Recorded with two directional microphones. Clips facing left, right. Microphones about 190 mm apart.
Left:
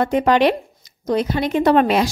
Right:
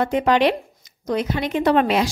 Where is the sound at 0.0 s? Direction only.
45° left (ahead or behind).